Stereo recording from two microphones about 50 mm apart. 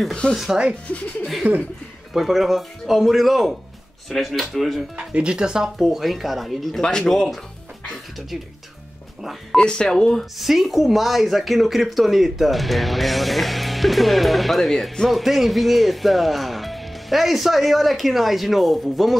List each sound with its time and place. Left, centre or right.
0.3 s speech: centre
1.5 s speech: right
2.1 s speech: centre
4.9 s speech: centre
6.8 s speech: centre
9.6 s speech: centre
10.3 s speech: centre